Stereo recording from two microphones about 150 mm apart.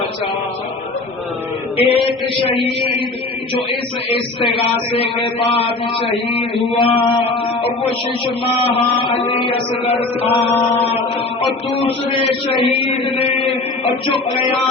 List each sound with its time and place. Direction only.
1.7 s speech: 40° left (ahead or behind)
4.5 s speech: 35° left (ahead or behind)